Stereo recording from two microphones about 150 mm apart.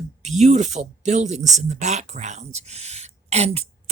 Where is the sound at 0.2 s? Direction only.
50° right (ahead or behind).